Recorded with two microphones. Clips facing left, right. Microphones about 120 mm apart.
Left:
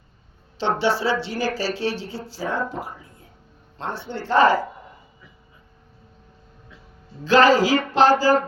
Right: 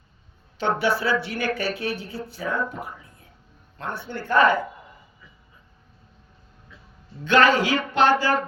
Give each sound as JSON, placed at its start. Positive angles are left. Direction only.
{"t": 0.6, "sound": "speech", "side_deg": 30}
{"t": 7.3, "sound": "speech", "side_deg": 35}